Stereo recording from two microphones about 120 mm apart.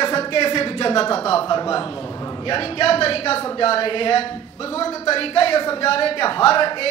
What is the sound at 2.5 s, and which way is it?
Speech, 55° left (ahead or behind).